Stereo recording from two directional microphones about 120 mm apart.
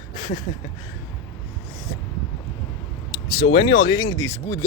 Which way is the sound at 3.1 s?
40° left (ahead or behind).